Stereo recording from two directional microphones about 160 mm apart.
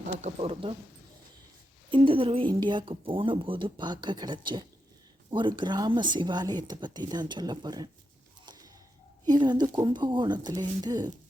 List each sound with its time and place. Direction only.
0.2 s speech: 40° right (ahead or behind)
1.9 s speech: 35° right (ahead or behind)
8.4 s a sound: 25° right (ahead or behind)
9.2 s speech: 25° right (ahead or behind)